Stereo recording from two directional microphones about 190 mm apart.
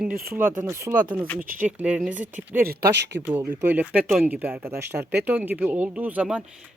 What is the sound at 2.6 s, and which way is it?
Speech, 60° right (ahead or behind).